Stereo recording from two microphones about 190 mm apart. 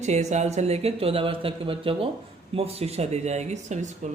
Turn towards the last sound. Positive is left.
turn(degrees=-35)  # may be behind; listen again after turning